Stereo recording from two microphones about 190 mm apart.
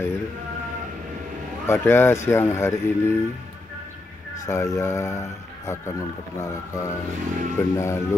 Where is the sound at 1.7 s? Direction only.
10° left (ahead or behind).